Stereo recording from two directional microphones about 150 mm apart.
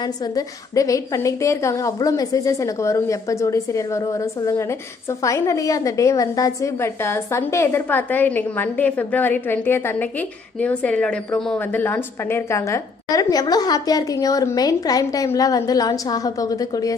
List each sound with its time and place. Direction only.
0.0 s a woman's voice: 25° left (ahead or behind)